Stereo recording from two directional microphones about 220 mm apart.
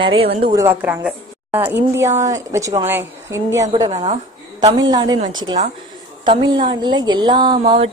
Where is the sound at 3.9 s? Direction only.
30° right (ahead or behind).